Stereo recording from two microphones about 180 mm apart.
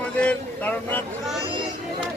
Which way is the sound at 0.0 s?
5° left (ahead or behind).